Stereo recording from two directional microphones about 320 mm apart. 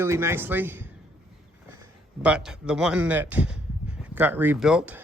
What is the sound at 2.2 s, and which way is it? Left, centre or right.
Speech, centre.